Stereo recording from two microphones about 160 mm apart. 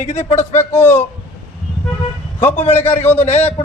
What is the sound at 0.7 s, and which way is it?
Speech, 15° left (ahead or behind).